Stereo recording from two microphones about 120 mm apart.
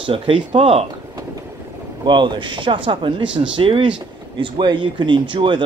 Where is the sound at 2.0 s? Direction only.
40° right (ahead or behind).